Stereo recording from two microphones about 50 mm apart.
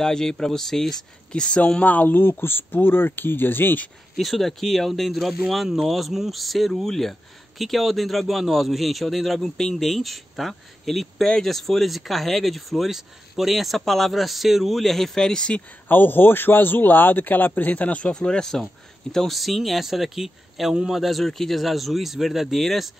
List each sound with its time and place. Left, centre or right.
0.0 s speech: centre
1.3 s speech: centre
1.9 s speech: left
4.2 s speech: centre
15.9 s speech: left
18.1 s speech: centre
21.0 s speech: centre